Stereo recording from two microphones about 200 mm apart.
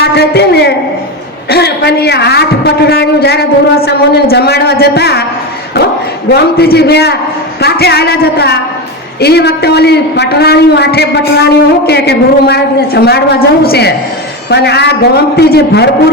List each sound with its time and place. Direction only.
0.0 s a man's voice: 55° left (ahead or behind)
6.3 s a woman's voice: 55° left (ahead or behind)